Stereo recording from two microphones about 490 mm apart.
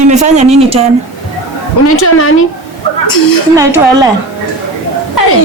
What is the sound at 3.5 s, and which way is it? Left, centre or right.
Speech, centre.